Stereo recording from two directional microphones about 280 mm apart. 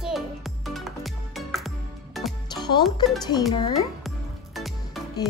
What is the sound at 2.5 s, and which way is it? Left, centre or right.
Music, centre.